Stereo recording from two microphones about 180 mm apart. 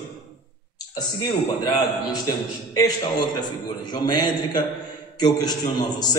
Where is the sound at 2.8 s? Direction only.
20° left (ahead or behind).